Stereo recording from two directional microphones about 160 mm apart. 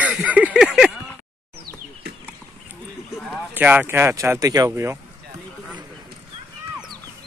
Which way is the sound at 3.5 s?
10° right (ahead or behind).